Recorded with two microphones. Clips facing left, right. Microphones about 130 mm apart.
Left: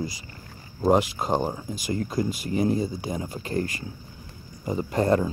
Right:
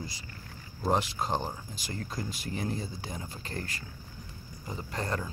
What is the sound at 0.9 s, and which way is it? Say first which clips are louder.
Speech: left 7 dB; 10° left (ahead or behind).